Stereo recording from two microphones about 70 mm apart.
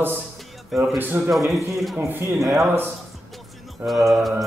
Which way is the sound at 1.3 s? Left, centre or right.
Centre.